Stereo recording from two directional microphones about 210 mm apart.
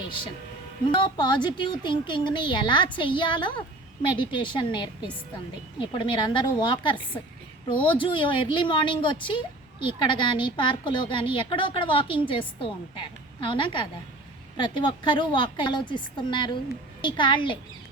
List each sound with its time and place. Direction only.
0.9 s speech: 20° left (ahead or behind)